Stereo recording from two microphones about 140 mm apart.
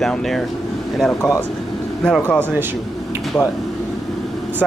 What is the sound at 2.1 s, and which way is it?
Speech, 10° left (ahead or behind).